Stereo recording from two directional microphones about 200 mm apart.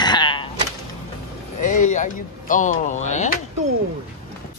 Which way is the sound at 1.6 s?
40° left (ahead or behind).